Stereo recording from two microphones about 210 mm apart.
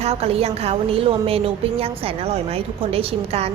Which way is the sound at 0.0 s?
30° right (ahead or behind).